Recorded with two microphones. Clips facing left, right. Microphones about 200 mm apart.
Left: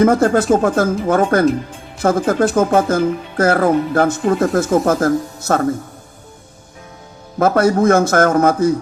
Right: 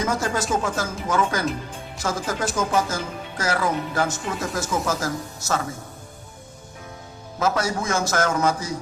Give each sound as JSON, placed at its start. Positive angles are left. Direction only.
{"t": 0.0, "sound": "speech", "side_deg": 55}
{"t": 7.3, "sound": "speech", "side_deg": 55}